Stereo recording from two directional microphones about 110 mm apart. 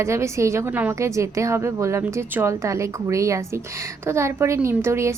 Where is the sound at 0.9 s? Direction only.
25° right (ahead or behind).